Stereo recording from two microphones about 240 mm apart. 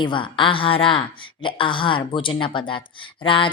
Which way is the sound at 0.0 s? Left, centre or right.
Centre.